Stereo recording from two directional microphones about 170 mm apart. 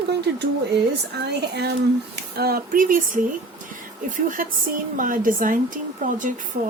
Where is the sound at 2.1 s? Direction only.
65° right (ahead or behind).